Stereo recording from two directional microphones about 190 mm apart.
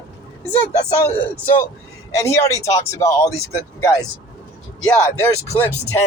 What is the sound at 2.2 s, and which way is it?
Speech, 15° left (ahead or behind).